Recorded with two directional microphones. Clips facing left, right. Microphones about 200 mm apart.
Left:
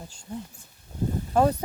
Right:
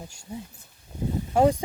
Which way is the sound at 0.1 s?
10° right (ahead or behind).